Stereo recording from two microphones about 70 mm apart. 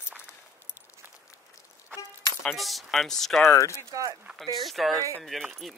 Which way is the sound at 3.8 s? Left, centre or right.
Right.